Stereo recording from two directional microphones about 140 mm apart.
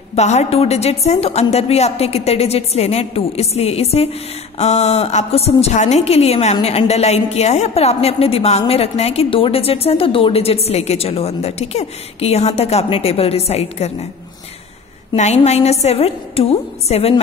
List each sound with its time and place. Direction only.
0.1 s a woman's voice: 50° left (ahead or behind)
15.1 s a woman's voice: 55° left (ahead or behind)